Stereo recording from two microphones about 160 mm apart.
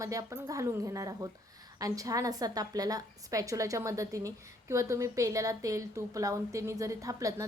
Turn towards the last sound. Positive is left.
turn(degrees=-20)  # may be behind; listen again after turning